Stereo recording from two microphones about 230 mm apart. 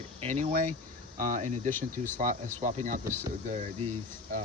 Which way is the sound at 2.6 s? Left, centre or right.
Right.